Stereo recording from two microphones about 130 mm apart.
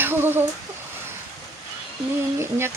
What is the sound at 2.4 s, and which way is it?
Speech, 20° right (ahead or behind).